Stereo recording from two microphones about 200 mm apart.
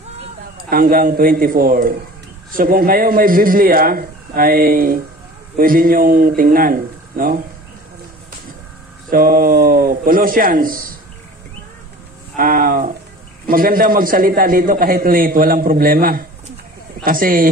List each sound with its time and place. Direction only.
0.7 s a man's voice: 45° right (ahead or behind)
9.1 s a man's voice: 45° right (ahead or behind)
12.4 s a man's voice: 45° right (ahead or behind)